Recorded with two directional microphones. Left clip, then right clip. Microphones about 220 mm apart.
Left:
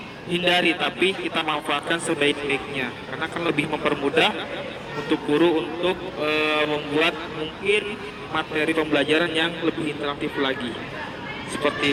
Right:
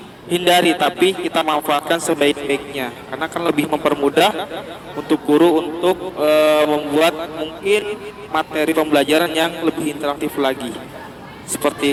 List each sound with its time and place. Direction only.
0.3 s a man's voice: 55° right (ahead or behind)